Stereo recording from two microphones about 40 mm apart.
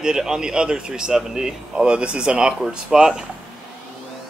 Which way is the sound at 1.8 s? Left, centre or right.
Right.